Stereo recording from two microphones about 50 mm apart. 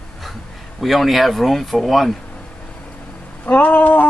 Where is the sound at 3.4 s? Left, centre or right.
Left.